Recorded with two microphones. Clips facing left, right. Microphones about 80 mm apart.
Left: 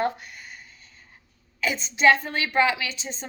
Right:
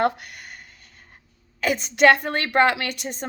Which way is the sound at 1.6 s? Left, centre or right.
Right.